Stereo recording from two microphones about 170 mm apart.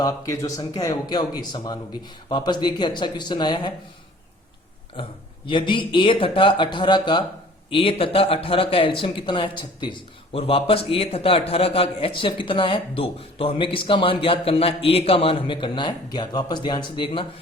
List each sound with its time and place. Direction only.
0.0 s speech: 20° left (ahead or behind)
5.5 s speech: 30° left (ahead or behind)